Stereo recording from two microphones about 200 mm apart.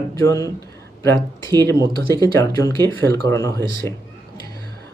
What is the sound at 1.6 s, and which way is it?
Speech, 15° left (ahead or behind).